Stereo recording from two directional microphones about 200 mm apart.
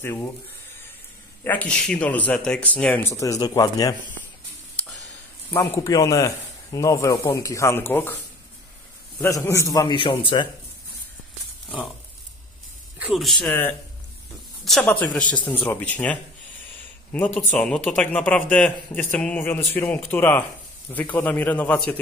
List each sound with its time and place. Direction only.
0.0 s speech: 10° left (ahead or behind)
1.4 s speech: 10° left (ahead or behind)
5.5 s speech: 15° left (ahead or behind)
9.2 s speech: 15° left (ahead or behind)
13.0 s speech: centre (ahead or behind)